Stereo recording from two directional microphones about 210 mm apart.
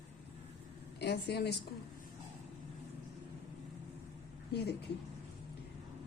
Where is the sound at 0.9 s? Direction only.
50° left (ahead or behind).